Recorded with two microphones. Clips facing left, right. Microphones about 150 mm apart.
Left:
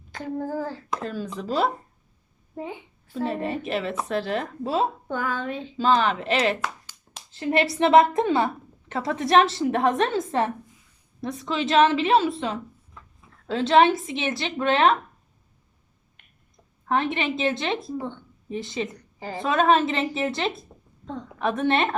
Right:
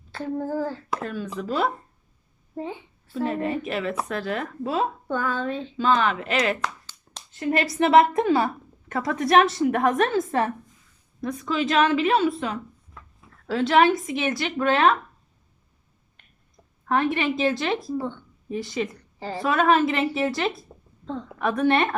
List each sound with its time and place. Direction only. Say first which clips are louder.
0.1 s a sound: right 1 dB; 15° left (ahead or behind)
1.0 s a woman's voice: left 1 dB; 30° left (ahead or behind)
2.6 s a sound: right 2 dB; 15° left (ahead or behind)
3.2 s a woman's voice: right 1 dB; 35° left (ahead or behind)
5.0 s speech: right 2 dB; 15° left (ahead or behind)
5.7 s a woman's voice: left 1 dB; 35° left (ahead or behind)
6.6 s clapping: right 1 dB; 10° left (ahead or behind)
7.5 s a woman's voice: even; 30° left (ahead or behind)
16.9 s a woman's voice: right 2 dB; 25° left (ahead or behind)